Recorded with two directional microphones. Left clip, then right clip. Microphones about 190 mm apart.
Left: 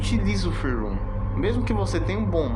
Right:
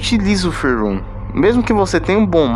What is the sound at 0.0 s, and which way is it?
Speech, 45° right (ahead or behind).